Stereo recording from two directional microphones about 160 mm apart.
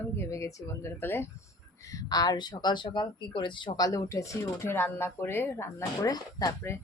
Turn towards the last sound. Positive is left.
turn(degrees=20)  # may be behind; listen again after turning